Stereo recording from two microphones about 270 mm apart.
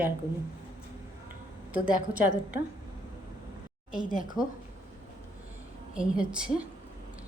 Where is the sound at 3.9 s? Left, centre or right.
Left.